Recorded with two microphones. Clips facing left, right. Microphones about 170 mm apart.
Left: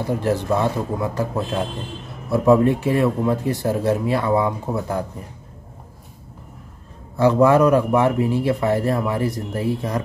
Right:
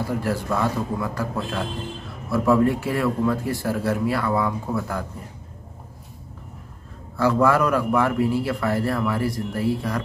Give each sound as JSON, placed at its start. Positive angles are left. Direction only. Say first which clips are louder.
{"t": 0.0, "sound": "a man's voice", "louder": "left 4 dB", "side_deg": 20}
{"t": 7.2, "sound": "a man's voice", "louder": "left 5 dB", "side_deg": 20}